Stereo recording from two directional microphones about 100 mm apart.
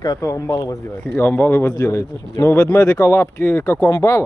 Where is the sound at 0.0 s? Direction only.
40° left (ahead or behind).